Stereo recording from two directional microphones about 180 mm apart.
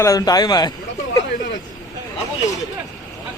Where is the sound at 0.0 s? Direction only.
20° left (ahead or behind).